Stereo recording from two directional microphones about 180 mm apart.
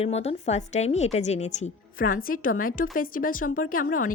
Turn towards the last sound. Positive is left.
turn(degrees=50)  # may be behind; listen again after turning